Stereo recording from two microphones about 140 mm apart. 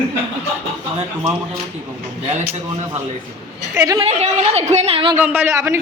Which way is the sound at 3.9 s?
50° right (ahead or behind).